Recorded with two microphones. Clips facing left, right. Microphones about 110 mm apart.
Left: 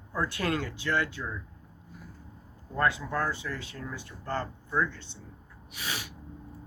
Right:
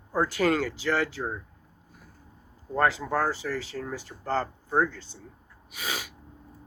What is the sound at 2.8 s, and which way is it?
Speech, 90° right.